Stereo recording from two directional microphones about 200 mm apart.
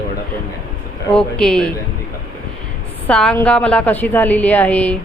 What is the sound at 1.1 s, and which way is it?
Speech, 5° left (ahead or behind).